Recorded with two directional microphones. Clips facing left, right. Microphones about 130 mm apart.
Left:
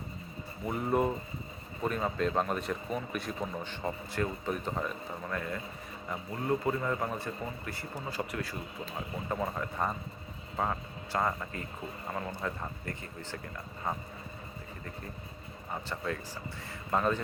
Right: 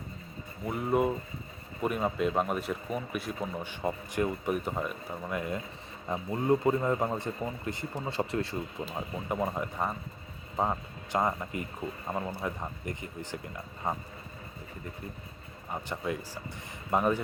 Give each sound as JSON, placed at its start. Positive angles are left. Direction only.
{"t": 0.6, "sound": "speech", "side_deg": 0}
{"t": 9.0, "sound": "speech", "side_deg": -15}
{"t": 15.7, "sound": "speech", "side_deg": -15}